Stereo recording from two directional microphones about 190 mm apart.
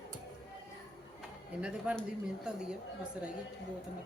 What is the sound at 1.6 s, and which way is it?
Speech, 5° right (ahead or behind).